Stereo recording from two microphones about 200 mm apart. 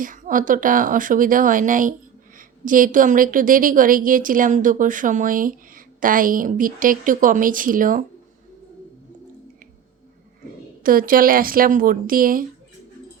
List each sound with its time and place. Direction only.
0.0 s a woman's voice: 40° right (ahead or behind)
10.8 s a woman's voice: 45° right (ahead or behind)